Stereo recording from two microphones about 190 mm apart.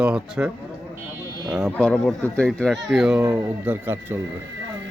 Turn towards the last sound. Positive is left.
turn(degrees=-10)  # may be behind; listen again after turning